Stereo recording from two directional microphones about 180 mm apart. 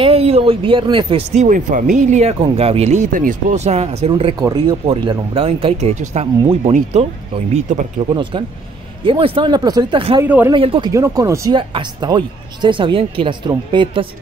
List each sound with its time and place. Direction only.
0.0 s speech: 35° right (ahead or behind)
1.3 s speech: 45° right (ahead or behind)
8.1 s speech: 25° right (ahead or behind)
10.2 s speech: 10° right (ahead or behind)
10.5 s speech: 30° right (ahead or behind)
10.9 s speech: 15° right (ahead or behind)